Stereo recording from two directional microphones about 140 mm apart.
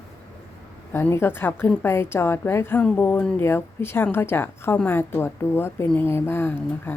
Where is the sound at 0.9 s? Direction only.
15° left (ahead or behind).